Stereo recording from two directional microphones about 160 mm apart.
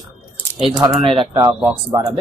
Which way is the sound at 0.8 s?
30° right (ahead or behind).